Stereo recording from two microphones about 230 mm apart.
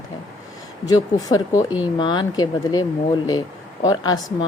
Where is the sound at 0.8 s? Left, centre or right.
Centre.